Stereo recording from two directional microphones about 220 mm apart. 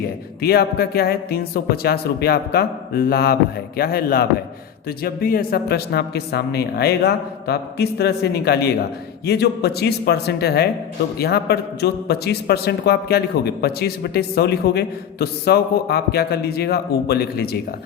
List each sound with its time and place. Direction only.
0.4 s a man's voice: 45° left (ahead or behind)